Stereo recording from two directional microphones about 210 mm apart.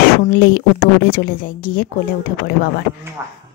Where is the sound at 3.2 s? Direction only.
10° right (ahead or behind).